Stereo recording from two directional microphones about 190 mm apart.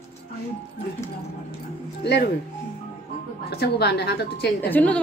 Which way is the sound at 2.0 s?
60° left (ahead or behind).